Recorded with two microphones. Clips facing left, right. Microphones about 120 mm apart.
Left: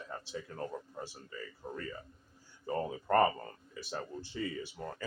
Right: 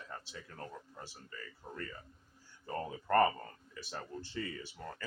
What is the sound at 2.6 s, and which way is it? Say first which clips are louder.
Speech: left 4 dB; 10° left (ahead or behind).